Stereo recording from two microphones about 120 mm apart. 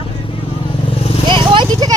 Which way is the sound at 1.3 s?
40° right (ahead or behind).